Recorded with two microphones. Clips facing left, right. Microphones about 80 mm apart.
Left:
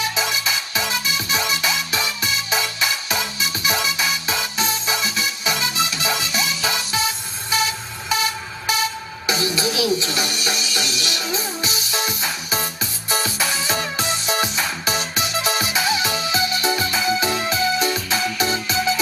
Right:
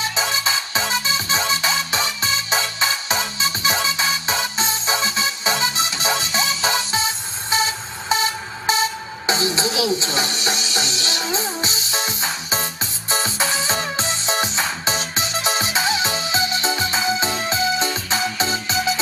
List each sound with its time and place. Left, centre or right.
0.0 s music: right
7.5 s vehicle: right
8.1 s music: right